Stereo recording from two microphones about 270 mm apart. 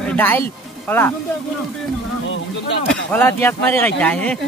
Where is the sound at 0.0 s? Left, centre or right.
Centre.